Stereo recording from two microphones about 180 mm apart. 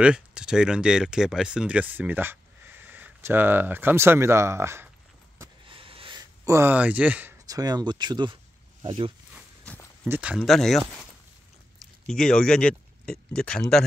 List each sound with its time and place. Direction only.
0.0 s speech: 5° right (ahead or behind)
5.7 s a sound: 30° right (ahead or behind); by 7.3 s 10° right (ahead or behind)
7.4 s speech: 20° right (ahead or behind)
10.0 s speech: 10° right (ahead or behind)
12.1 s speech: 5° left (ahead or behind)